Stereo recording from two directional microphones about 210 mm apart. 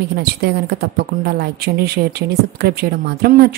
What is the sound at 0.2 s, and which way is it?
Speech, 50° right (ahead or behind).